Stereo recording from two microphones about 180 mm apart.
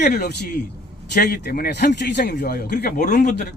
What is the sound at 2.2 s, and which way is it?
Speech, 55° left (ahead or behind).